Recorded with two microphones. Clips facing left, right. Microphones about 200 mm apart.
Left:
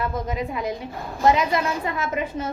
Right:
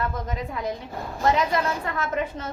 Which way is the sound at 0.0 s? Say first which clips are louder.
Left 3 dB; 10° left (ahead or behind).